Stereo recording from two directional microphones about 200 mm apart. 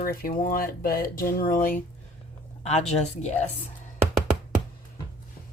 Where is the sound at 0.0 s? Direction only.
45° left (ahead or behind).